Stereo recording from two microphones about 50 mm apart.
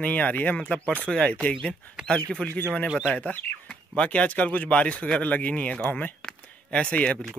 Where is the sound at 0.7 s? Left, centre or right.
Left.